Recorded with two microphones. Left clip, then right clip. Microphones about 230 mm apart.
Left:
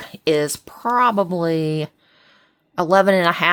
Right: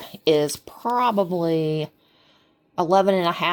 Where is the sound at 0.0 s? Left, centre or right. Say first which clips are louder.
Left 1 dB; left.